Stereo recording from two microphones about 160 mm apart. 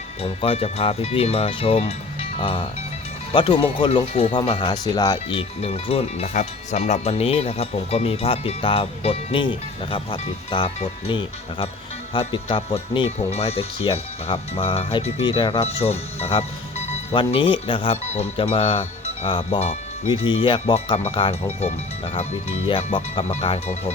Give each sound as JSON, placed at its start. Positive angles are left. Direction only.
{"t": 0.2, "sound": "speech", "side_deg": 40}
{"t": 20.1, "sound": "speech", "side_deg": 30}